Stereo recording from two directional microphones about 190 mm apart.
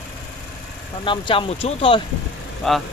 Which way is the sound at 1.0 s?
25° left (ahead or behind).